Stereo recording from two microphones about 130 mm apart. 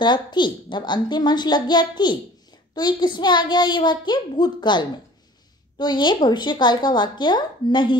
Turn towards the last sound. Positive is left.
turn(degrees=35)  # may be behind; listen again after turning